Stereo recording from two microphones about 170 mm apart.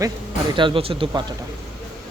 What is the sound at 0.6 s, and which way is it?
Speech, 30° right (ahead or behind).